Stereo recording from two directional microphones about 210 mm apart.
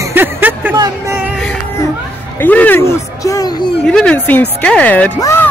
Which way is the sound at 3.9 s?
5° left (ahead or behind).